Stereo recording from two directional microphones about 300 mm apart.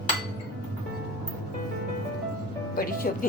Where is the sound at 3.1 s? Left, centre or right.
Left.